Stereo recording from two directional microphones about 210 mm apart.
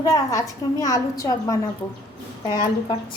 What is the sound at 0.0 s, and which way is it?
A woman's voice, 15° left (ahead or behind).